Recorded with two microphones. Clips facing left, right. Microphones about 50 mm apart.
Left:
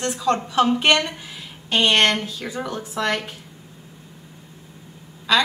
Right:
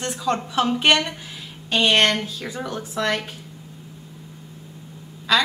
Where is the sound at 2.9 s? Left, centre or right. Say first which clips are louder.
Even; centre.